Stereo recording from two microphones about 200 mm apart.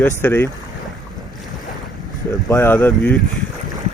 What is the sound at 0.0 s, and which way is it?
Speech, 10° left (ahead or behind).